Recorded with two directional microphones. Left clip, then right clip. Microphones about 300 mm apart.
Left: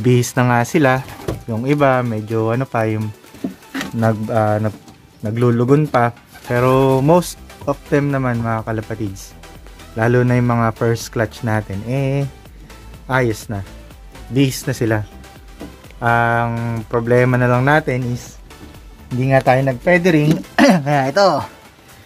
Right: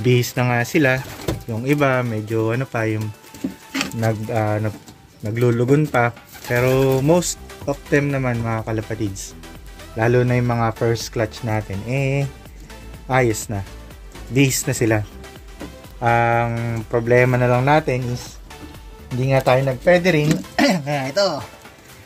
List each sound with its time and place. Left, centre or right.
0.0 s speech: centre
20.0 s speech: left